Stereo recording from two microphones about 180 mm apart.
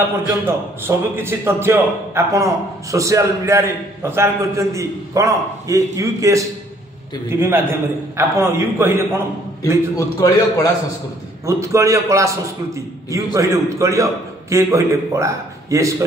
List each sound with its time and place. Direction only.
0.5 s a man's voice: 15° right (ahead or behind)
9.9 s a man's voice: 20° left (ahead or behind)
11.4 s a man's voice: 15° right (ahead or behind)